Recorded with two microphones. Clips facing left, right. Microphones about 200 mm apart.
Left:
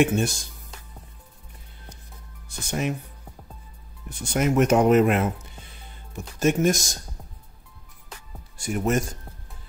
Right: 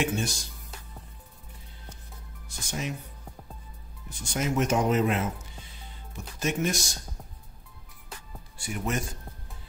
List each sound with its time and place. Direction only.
0.0 s speech: 55° left (ahead or behind)
2.4 s speech: 60° left (ahead or behind)
4.3 s speech: 60° left (ahead or behind)
6.4 s speech: 45° left (ahead or behind)
8.5 s speech: 45° left (ahead or behind)